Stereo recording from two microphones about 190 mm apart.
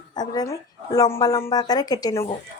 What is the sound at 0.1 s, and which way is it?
Speech, 20° left (ahead or behind).